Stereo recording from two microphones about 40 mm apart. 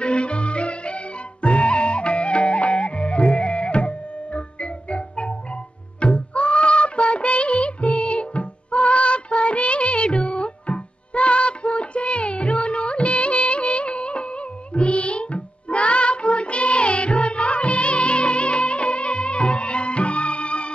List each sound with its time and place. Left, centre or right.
0.0 s music: left